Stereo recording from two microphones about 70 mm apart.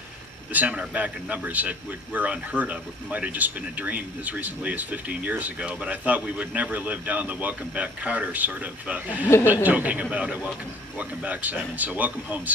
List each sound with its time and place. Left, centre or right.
0.5 s speech: right